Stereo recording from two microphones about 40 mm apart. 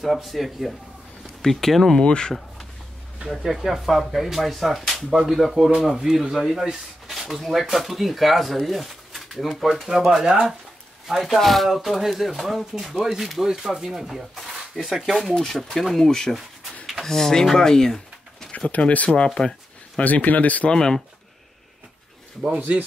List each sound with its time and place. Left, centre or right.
0.0 s speech: centre
2.0 s speech: centre
3.3 s speech: centre
5.6 s speech: centre
11.1 s speech: centre
15.2 s speech: centre
18.7 s speech: left
20.0 s speech: left
20.6 s speech: centre
22.6 s speech: right